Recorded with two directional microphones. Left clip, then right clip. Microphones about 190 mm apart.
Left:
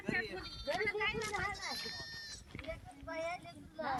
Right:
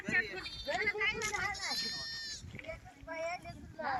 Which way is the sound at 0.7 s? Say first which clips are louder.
Right 2 dB; 50° left (ahead or behind).